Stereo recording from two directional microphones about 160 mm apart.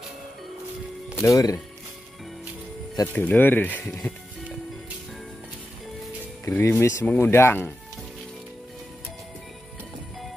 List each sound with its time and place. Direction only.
1.2 s speech: 20° left (ahead or behind)
3.1 s speech: 10° left (ahead or behind)
6.4 s speech: 15° left (ahead or behind)